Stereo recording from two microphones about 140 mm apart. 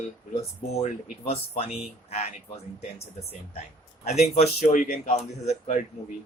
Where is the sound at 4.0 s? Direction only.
50° left (ahead or behind).